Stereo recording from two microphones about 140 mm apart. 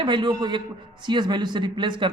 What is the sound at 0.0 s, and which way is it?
A woman's voice, 35° right (ahead or behind).